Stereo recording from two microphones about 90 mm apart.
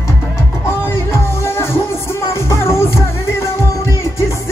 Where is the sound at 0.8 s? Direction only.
25° left (ahead or behind).